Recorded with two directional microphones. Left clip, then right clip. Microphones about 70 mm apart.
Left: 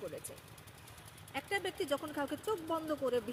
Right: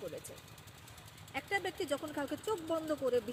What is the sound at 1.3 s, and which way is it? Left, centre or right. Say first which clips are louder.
Speech: right 1 dB; left.